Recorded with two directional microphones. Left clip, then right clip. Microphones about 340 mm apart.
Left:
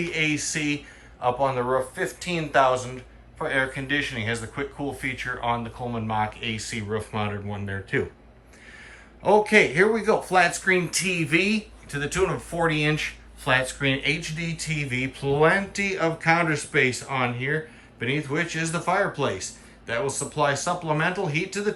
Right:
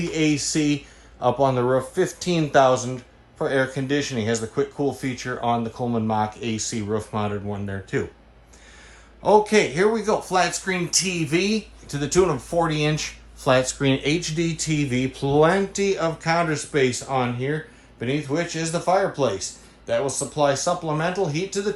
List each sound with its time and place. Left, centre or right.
0.0 s speech: centre
9.2 s speech: centre